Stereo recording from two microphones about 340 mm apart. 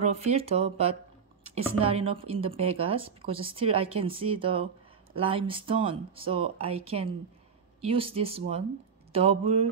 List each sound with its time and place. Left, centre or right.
0.0 s speech: centre